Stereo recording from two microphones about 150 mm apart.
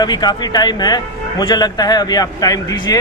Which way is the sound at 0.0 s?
25° left (ahead or behind).